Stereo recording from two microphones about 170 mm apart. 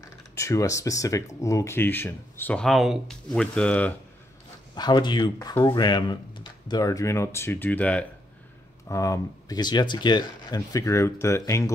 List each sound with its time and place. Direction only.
0.0 s speech: 20° left (ahead or behind)
4.7 s speech: 25° left (ahead or behind); by 8.1 s 10° left (ahead or behind)
8.8 s speech: 20° left (ahead or behind)